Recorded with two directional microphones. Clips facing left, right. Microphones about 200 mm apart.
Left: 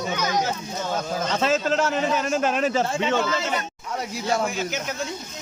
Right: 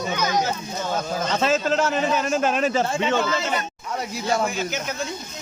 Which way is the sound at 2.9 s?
55° right (ahead or behind).